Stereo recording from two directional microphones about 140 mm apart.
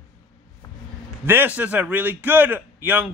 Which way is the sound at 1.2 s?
15° right (ahead or behind).